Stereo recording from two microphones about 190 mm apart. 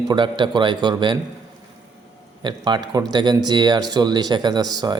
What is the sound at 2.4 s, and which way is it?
A man's voice, 25° right (ahead or behind).